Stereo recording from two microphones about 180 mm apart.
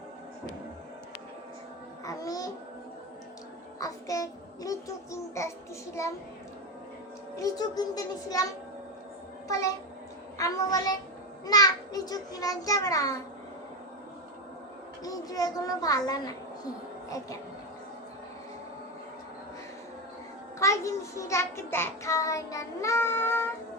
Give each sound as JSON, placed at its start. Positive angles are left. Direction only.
{"t": 2.0, "sound": "babbling", "side_deg": 20}
{"t": 3.8, "sound": "a child's voice", "side_deg": 20}
{"t": 5.4, "sound": "child singing", "side_deg": 15}
{"t": 7.3, "sound": "speech", "side_deg": 20}
{"t": 9.5, "sound": "child singing", "side_deg": 15}
{"t": 10.3, "sound": "a child's voice", "side_deg": 20}
{"t": 15.0, "sound": "speech", "side_deg": 20}
{"t": 20.6, "sound": "child singing", "side_deg": 15}